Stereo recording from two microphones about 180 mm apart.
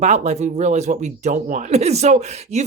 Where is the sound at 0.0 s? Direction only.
40° right (ahead or behind).